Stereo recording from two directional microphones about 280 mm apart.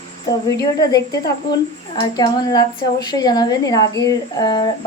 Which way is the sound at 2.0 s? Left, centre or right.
Centre.